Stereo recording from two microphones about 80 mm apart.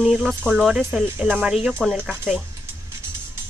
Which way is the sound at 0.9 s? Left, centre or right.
Centre.